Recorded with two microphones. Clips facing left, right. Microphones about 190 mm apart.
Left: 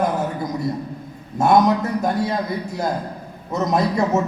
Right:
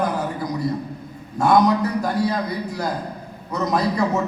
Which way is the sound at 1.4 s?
25° left (ahead or behind).